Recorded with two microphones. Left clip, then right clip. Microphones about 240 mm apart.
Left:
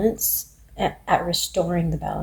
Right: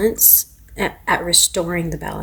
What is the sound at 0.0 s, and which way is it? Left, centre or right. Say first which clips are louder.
A woman's voice: right 5 dB; right.